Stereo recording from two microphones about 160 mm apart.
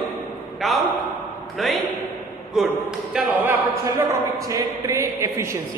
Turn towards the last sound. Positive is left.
turn(degrees=-15)  # may be behind; listen again after turning